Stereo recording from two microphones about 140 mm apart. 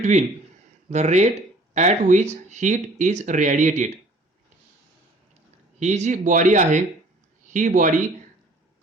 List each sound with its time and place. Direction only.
0.0 s a man's voice: 55° right (ahead or behind)
5.8 s speech: 55° right (ahead or behind)